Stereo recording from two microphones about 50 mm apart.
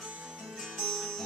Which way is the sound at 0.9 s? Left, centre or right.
Centre.